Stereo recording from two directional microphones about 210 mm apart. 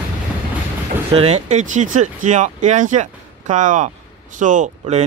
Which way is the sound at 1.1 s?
30° right (ahead or behind).